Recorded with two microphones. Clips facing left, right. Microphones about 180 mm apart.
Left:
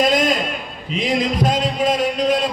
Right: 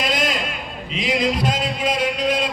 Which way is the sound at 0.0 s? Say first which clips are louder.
Left 6 dB; 45° left (ahead or behind).